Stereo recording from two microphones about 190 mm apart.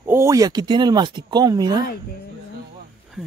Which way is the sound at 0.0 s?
15° right (ahead or behind).